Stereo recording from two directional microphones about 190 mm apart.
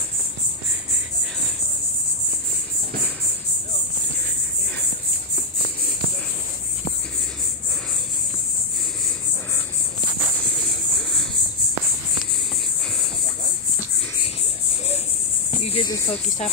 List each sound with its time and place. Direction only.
15.6 s cricket: 25° left (ahead or behind)